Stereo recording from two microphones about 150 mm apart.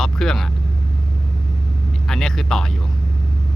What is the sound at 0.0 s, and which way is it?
Vehicle, centre (ahead or behind).